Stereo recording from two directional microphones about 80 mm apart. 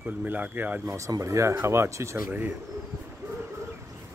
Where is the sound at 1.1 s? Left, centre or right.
Right.